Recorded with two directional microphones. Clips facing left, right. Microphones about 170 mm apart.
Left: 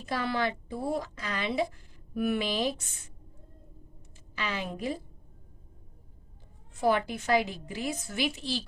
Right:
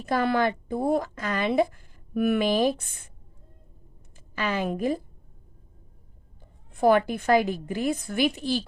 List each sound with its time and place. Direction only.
0.0 s a woman's voice: 55° right (ahead or behind)
4.4 s a woman's voice: 50° right (ahead or behind)
6.7 s a woman's voice: 55° right (ahead or behind)